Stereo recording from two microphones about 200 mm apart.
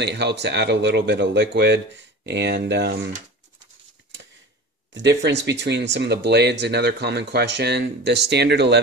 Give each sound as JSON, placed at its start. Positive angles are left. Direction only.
{"t": 0.0, "sound": "speech", "side_deg": -60}
{"t": 4.9, "sound": "speech", "side_deg": -60}